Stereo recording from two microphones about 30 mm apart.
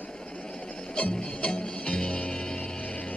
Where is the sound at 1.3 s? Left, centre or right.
Left.